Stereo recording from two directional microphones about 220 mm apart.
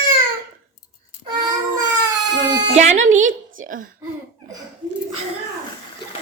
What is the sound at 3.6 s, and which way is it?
Speech, 40° right (ahead or behind).